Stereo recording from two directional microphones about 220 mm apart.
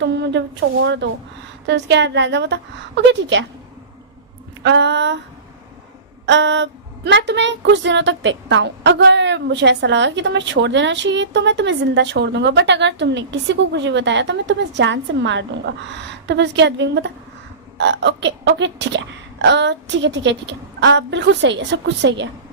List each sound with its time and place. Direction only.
0.0 s a woman's voice: 50° right (ahead or behind)
4.6 s a woman's voice: 55° right (ahead or behind)
6.2 s a woman's voice: 55° right (ahead or behind)